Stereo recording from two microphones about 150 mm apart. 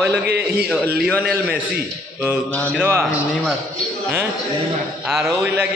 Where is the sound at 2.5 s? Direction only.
10° left (ahead or behind).